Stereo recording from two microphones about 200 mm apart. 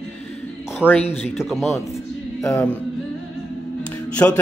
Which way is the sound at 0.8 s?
5° right (ahead or behind).